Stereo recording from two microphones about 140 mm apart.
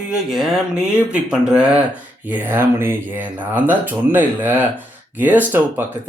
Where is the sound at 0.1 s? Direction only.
5° right (ahead or behind).